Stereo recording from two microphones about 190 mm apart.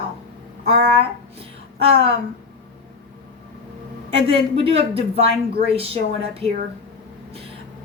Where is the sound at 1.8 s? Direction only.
30° right (ahead or behind).